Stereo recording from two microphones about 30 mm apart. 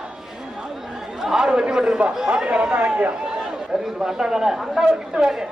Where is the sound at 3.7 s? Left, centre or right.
Right.